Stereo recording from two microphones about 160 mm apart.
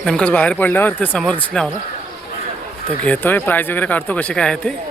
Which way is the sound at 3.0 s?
10° left (ahead or behind).